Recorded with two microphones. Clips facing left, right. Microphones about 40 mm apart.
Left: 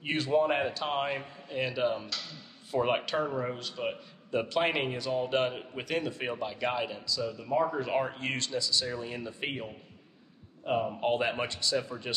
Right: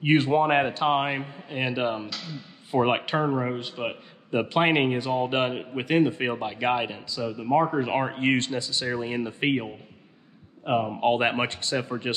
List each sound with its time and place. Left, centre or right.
0.0 s a man's voice: right